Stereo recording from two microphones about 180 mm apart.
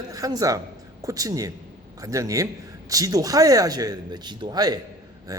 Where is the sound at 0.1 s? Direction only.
20° right (ahead or behind).